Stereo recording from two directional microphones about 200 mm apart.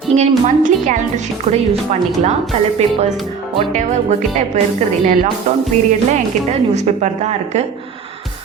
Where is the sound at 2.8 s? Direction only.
30° right (ahead or behind).